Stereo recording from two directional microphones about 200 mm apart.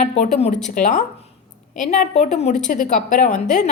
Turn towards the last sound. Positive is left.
turn(degrees=35)  # may be behind; listen again after turning